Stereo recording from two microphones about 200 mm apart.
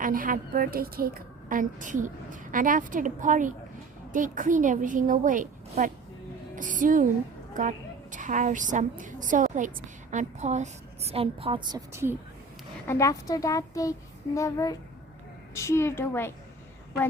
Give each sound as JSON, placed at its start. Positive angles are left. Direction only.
{"t": 0.0, "sound": "a woman's voice", "side_deg": -45}
{"t": 12.9, "sound": "a woman's voice", "side_deg": 15}